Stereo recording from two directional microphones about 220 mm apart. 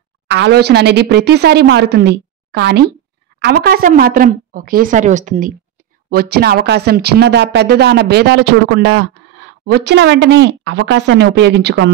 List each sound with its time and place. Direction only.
0.3 s a woman's voice: 50° right (ahead or behind)